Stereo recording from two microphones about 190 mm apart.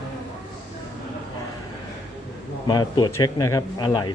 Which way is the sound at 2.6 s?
25° left (ahead or behind).